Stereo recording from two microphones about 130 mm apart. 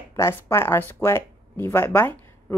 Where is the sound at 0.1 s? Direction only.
20° left (ahead or behind).